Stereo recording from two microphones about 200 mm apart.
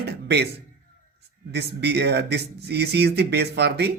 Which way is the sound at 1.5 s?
55° right (ahead or behind).